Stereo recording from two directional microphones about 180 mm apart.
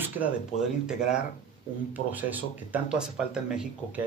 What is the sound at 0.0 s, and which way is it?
Speech, 5° right (ahead or behind).